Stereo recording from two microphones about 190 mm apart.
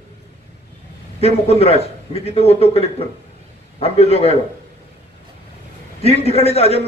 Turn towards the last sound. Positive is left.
turn(degrees=30)  # may be behind; listen again after turning